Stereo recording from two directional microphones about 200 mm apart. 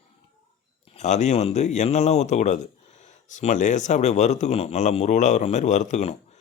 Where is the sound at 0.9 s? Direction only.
35° left (ahead or behind).